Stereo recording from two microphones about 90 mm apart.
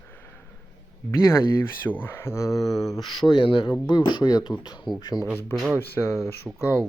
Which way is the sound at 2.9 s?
55° left (ahead or behind).